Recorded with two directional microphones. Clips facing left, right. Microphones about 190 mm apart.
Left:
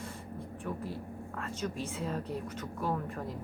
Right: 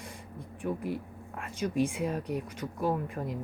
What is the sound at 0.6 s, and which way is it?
Speech, 15° right (ahead or behind).